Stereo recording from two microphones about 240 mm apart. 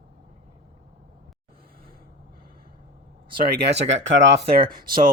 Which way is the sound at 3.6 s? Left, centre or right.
Right.